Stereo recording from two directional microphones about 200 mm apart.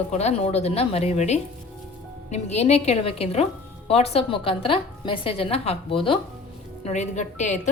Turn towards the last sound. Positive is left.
turn(degrees=35)  # may be behind; listen again after turning